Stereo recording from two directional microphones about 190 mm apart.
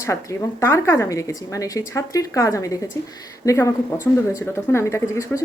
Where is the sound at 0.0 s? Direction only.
15° left (ahead or behind).